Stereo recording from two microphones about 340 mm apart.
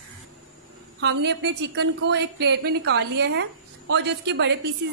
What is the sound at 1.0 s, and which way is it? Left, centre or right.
A woman's voice, right.